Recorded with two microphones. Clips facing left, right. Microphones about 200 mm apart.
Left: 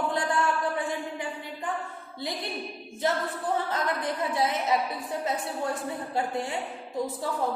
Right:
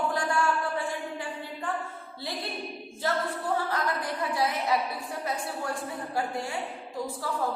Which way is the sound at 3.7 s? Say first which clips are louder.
Left 1 dB; 20° left (ahead or behind).